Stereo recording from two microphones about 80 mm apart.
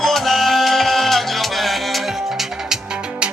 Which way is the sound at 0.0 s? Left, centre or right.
Centre.